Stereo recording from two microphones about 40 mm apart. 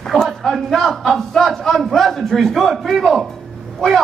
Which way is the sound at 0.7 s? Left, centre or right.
Centre.